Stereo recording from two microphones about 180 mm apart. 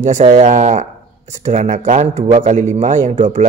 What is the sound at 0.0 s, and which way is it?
A man's voice, 40° right (ahead or behind).